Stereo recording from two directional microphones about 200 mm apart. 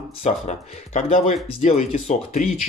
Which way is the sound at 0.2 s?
35° left (ahead or behind).